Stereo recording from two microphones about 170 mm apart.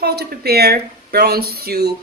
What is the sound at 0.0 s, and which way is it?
A woman's voice, 70° right (ahead or behind).